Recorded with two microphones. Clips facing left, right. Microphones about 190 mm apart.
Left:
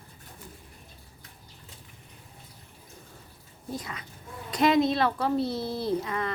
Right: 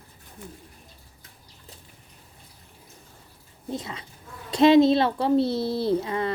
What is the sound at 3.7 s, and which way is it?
Speech, 25° right (ahead or behind).